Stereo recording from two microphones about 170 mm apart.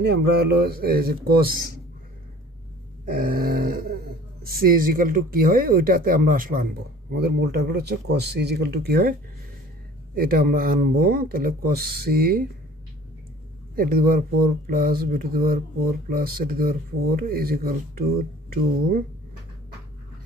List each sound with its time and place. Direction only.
0.0 s speech: 75° right (ahead or behind)
3.1 s speech: 55° right (ahead or behind)
10.1 s speech: 60° right (ahead or behind)
13.7 s speech: 60° right (ahead or behind)